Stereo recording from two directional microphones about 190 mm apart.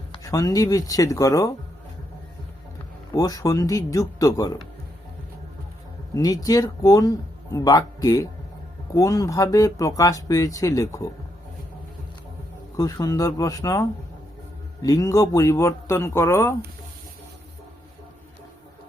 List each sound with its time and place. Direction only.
0.1 s speech: 20° left (ahead or behind)
3.1 s speech: 20° left (ahead or behind)
6.1 s speech: 20° left (ahead or behind)
12.7 s speech: 20° left (ahead or behind)